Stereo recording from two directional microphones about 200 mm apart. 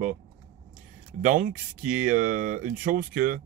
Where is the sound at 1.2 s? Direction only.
40° right (ahead or behind).